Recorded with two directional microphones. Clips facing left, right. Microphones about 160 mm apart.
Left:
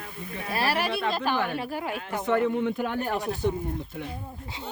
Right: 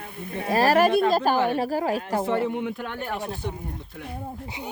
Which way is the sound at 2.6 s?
Centre (ahead or behind).